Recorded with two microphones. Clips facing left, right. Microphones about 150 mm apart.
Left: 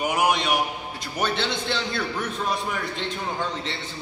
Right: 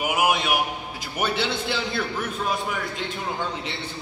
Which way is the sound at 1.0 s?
5° right (ahead or behind).